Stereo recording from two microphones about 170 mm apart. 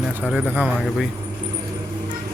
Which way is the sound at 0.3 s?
10° right (ahead or behind).